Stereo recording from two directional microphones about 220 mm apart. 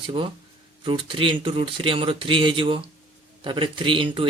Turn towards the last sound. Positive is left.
turn(degrees=-25)  # may be behind; listen again after turning